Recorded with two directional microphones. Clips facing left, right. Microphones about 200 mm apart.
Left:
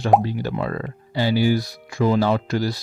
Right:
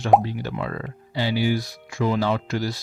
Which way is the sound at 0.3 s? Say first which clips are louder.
Left 4 dB; 40° left (ahead or behind).